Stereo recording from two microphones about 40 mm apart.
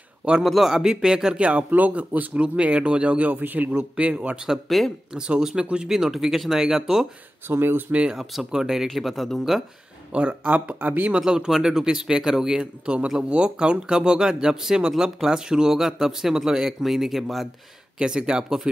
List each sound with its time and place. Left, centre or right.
0.4 s speech: centre
0.7 s speech: centre
1.9 s speech: right
3.7 s speech: right
4.6 s speech: centre
5.1 s speech: right
7.4 s speech: right
8.1 s speech: centre
8.8 s speech: centre
10.1 s speech: right
10.8 s speech: right
11.1 s speech: centre
13.3 s speech: right; by 17.5 s centre
17.9 s speech: right